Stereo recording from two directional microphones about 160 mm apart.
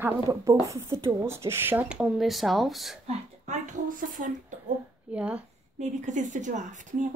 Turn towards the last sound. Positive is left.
turn(degrees=-50)  # may be behind; listen again after turning